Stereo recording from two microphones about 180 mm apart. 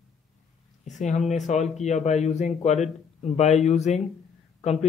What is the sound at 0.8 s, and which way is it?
Speech, 40° left (ahead or behind).